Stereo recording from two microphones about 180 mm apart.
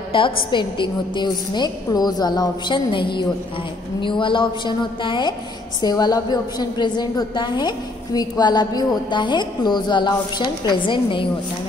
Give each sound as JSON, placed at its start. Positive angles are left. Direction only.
{"t": 0.1, "sound": "a woman's voice", "side_deg": 25}